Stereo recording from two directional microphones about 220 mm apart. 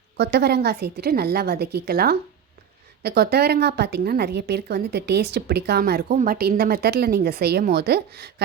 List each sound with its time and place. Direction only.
0.2 s a woman's voice: 50° right (ahead or behind)